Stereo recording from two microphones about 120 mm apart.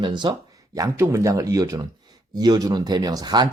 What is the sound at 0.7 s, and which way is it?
Speech, 25° right (ahead or behind).